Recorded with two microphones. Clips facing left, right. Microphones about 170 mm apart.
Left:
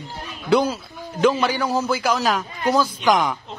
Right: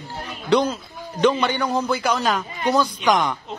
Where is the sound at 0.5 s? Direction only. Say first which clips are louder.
Even; 5° left (ahead or behind).